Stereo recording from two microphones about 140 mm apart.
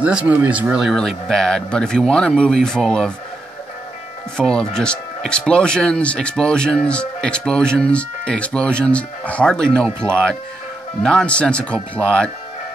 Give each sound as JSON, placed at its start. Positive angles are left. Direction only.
{"t": 0.0, "sound": "speech", "side_deg": -10}
{"t": 4.4, "sound": "speech", "side_deg": 5}
{"t": 9.8, "sound": "speech", "side_deg": -15}
{"t": 11.0, "sound": "speech", "side_deg": 5}